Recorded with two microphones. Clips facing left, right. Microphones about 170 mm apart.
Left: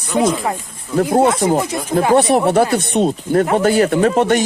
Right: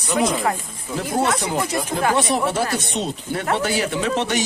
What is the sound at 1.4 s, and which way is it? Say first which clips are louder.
Speech: left 8 dB; 45° left (ahead or behind).